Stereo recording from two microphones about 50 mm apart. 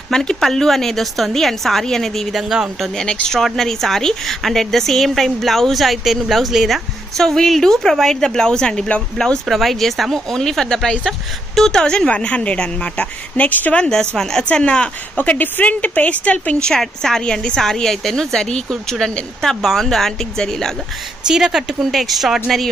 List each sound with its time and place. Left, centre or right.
0.1 s speech: centre
2.3 s speech: centre
3.1 s speech: centre
3.3 s a woman's voice: centre
9.5 s speech: centre; by 13.5 s left
13.5 s a woman's voice: left
13.7 s speech: centre
14.4 s speech: centre
15.1 s speech: left
16.6 s speech: centre
21.3 s a woman's voice: centre